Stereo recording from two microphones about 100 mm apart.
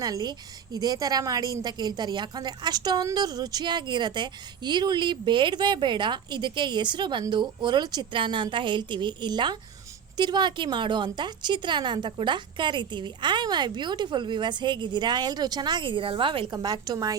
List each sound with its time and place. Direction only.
0.0 s a woman's voice: 40° right (ahead or behind); by 16.5 s 60° right (ahead or behind)
16.5 s a woman's voice: 45° right (ahead or behind)